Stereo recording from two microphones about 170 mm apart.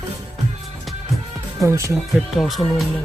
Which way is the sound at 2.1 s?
Centre (ahead or behind).